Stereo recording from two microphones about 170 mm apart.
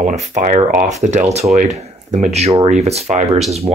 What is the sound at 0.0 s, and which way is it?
Speech, 45° right (ahead or behind).